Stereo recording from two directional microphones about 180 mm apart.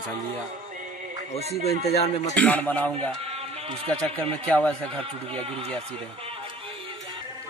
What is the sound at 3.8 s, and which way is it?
Speech, 5° left (ahead or behind).